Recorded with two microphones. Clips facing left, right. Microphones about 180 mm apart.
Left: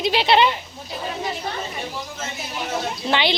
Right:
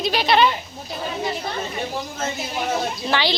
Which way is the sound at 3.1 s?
20° left (ahead or behind).